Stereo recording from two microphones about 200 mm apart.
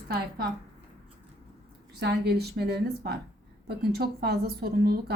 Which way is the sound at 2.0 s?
55° right (ahead or behind).